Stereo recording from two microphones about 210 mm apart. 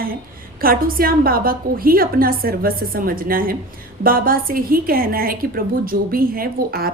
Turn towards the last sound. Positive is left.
turn(degrees=-45)  # may be behind; listen again after turning